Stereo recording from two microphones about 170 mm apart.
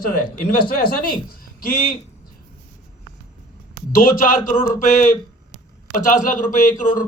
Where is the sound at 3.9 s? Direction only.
55° left (ahead or behind).